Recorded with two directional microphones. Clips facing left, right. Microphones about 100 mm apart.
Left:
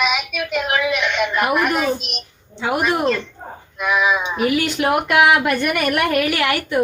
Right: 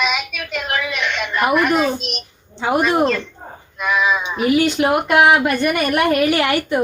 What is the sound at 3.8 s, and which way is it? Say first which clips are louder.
Speech: even; 10° left (ahead or behind).